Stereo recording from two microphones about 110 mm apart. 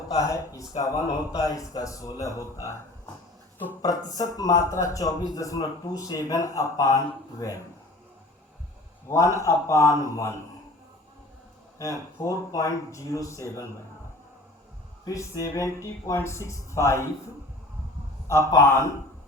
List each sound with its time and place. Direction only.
0.1 s a man's voice: 30° left (ahead or behind)
9.0 s speech: 25° left (ahead or behind)
11.8 s speech: 30° left (ahead or behind)
15.0 s speech: 30° left (ahead or behind)
18.3 s speech: 25° left (ahead or behind)